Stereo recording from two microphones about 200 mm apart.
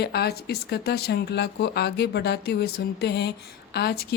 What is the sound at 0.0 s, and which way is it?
Speech, 55° left (ahead or behind).